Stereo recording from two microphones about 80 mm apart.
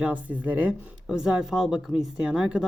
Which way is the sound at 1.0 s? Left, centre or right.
Centre.